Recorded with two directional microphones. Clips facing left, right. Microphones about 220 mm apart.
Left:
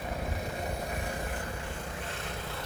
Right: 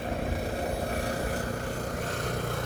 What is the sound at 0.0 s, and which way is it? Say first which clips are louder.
Vehicle: right 5 dB; 30° right (ahead or behind).